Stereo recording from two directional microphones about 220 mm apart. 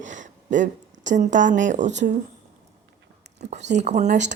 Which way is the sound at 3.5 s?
30° right (ahead or behind).